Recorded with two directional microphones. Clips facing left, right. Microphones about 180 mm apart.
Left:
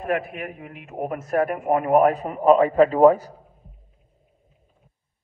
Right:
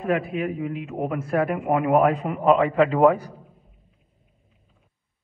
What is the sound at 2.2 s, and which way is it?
A man's voice, 40° left (ahead or behind).